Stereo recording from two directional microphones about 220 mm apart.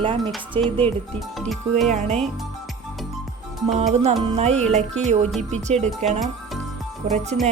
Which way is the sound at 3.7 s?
30° right (ahead or behind).